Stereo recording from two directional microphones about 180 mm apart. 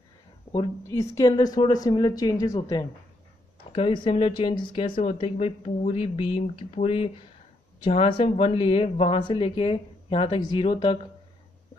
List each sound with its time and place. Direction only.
0.8 s a woman's voice: 15° left (ahead or behind)